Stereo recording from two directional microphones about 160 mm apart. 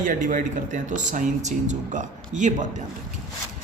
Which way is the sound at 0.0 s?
55° right (ahead or behind).